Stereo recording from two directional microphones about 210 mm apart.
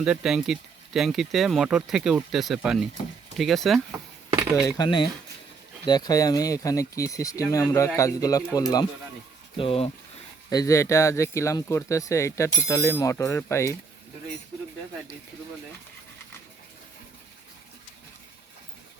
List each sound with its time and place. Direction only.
0.0 s speech: 5° right (ahead or behind)
4.6 s speech: 20° left (ahead or behind)
9.6 s speech: 25° left (ahead or behind)
10.5 s speech: 15° left (ahead or behind)